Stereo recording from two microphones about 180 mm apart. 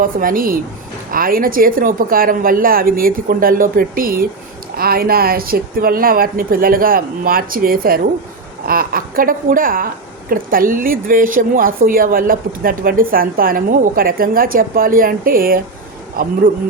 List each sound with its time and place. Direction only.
0.0 s a woman's voice: 50° right (ahead or behind)